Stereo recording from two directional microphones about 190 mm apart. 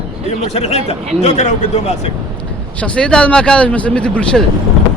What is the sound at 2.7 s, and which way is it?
Speech, 5° left (ahead or behind).